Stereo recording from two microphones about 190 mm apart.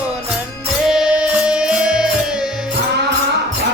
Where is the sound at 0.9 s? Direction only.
5° right (ahead or behind).